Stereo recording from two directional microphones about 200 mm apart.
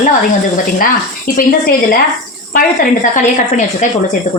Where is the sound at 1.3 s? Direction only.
45° left (ahead or behind).